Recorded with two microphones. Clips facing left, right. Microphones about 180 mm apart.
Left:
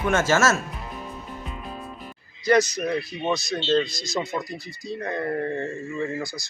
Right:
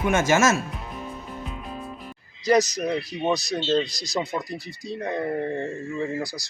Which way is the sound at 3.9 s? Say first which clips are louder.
Even; 35° right (ahead or behind).